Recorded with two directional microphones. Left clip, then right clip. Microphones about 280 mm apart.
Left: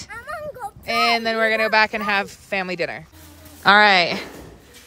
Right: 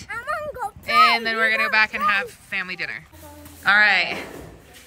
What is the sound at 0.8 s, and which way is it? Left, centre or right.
A woman's voice, centre.